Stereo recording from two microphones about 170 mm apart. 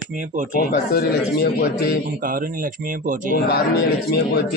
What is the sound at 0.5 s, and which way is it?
Speech, 65° left (ahead or behind).